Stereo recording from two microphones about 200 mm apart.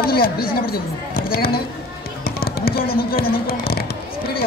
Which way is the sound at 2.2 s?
50° left (ahead or behind).